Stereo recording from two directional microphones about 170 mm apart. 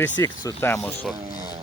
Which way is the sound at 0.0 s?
10° left (ahead or behind).